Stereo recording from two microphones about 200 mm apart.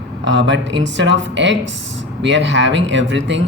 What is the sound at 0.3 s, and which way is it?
Speech, 65° right (ahead or behind).